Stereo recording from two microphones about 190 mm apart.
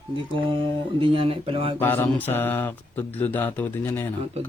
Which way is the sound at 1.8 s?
10° left (ahead or behind).